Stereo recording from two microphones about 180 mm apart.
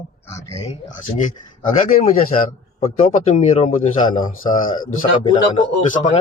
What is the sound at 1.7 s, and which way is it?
Speech, 50° left (ahead or behind).